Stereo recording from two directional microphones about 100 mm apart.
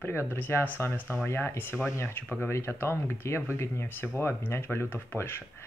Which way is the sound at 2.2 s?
15° left (ahead or behind).